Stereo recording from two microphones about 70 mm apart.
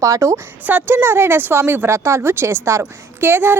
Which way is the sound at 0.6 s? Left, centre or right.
Right.